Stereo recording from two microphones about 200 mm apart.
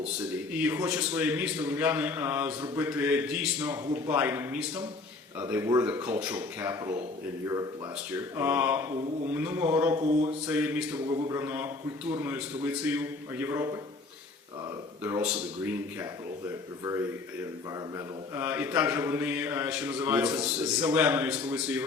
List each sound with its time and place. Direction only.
0.6 s speech: 10° right (ahead or behind)
8.1 s speech: 10° right (ahead or behind)
10.0 s speech: 35° right (ahead or behind)
10.4 s speech: 10° right (ahead or behind)
15.0 s speech: 10° right (ahead or behind)
16.8 s speech: 15° right (ahead or behind)